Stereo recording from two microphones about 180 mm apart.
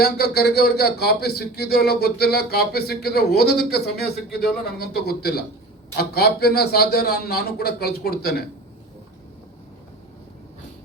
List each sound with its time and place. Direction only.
0.0 s speech: 60° left (ahead or behind)